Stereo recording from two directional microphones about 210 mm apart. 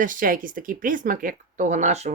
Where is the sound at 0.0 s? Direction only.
40° right (ahead or behind).